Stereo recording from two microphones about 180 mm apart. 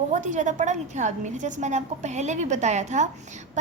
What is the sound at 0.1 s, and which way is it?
A woman's voice, 40° right (ahead or behind).